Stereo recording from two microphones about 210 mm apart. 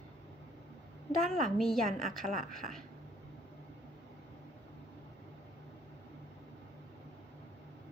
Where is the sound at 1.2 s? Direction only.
Centre (ahead or behind).